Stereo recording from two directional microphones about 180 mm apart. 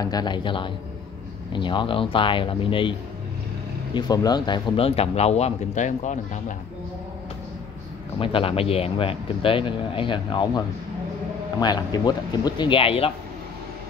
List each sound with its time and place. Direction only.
0.0 s speech: 20° left (ahead or behind)
3.9 s speech: 20° left (ahead or behind); by 6.1 s 40° left (ahead or behind)
8.2 s speech: 30° left (ahead or behind)
11.6 s speech: 25° left (ahead or behind)